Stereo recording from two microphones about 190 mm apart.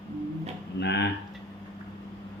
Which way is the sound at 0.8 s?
65° left (ahead or behind).